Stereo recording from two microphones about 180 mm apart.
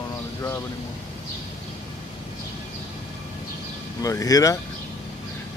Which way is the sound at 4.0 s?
20° left (ahead or behind).